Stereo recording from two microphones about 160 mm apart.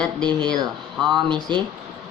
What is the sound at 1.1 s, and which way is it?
Speech, 30° right (ahead or behind).